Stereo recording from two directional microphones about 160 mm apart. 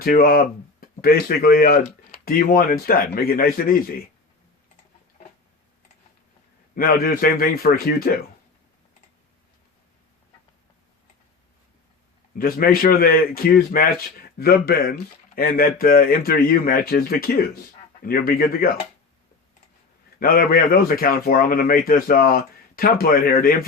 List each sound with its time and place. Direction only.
0.0 s a man's voice: 65° left (ahead or behind)
6.7 s a man's voice: 65° left (ahead or behind)
12.4 s a man's voice: 65° left (ahead or behind)
20.1 s a man's voice: 60° left (ahead or behind)